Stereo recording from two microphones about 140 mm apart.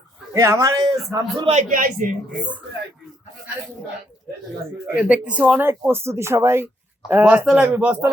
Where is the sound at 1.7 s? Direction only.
75° right (ahead or behind).